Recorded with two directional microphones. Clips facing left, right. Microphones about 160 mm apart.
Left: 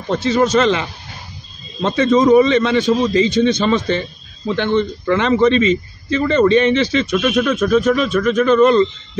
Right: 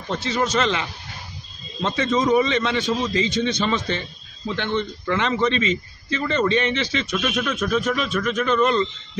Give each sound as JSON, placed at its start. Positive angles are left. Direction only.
{"t": 0.1, "sound": "a man's voice", "side_deg": 45}